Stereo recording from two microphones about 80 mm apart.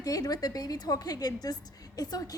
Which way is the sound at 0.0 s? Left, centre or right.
Left.